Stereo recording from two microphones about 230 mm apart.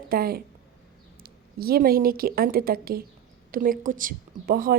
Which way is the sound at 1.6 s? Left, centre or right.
Right.